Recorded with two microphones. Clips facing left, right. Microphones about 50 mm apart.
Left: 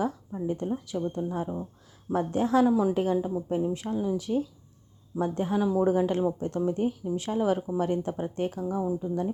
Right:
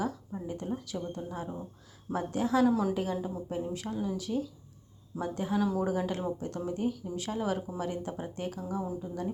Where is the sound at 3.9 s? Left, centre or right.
Centre.